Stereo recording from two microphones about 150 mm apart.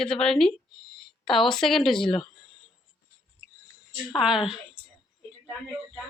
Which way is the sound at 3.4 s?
10° right (ahead or behind).